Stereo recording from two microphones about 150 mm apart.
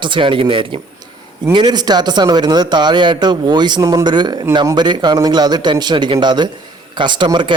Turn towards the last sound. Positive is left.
turn(degrees=-30)  # may be behind; listen again after turning